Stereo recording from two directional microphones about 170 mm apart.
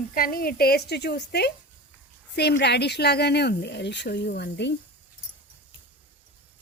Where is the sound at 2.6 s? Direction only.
80° left.